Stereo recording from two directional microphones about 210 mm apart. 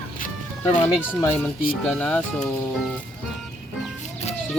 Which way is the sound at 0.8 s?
10° left (ahead or behind).